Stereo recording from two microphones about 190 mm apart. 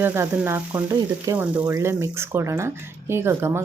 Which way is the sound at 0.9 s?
20° right (ahead or behind).